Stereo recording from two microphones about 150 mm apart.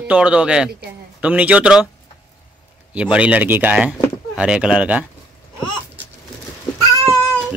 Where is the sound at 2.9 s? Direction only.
10° right (ahead or behind).